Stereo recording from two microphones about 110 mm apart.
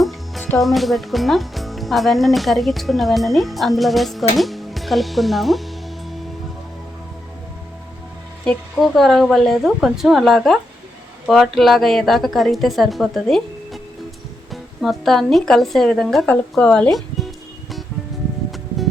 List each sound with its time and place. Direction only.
0.6 s speech: centre (ahead or behind)
8.4 s speech: centre (ahead or behind)
14.5 s speech: centre (ahead or behind)